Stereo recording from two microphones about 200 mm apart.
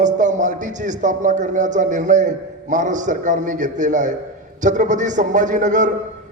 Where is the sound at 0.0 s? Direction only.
40° right (ahead or behind).